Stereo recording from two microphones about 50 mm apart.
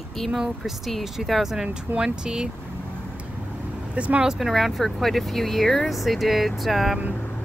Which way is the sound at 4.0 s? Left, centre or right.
Right.